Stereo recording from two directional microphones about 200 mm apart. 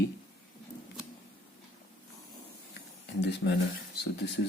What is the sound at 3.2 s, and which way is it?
Speech, 60° left (ahead or behind).